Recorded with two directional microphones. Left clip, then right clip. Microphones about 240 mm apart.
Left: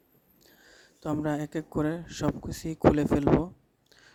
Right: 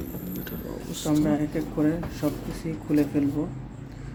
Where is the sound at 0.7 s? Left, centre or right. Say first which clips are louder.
Right 7 dB; left.